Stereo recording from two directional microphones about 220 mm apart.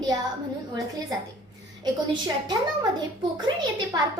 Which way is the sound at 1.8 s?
20° right (ahead or behind).